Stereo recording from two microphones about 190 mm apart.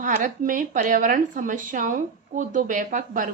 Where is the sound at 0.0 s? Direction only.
45° right (ahead or behind).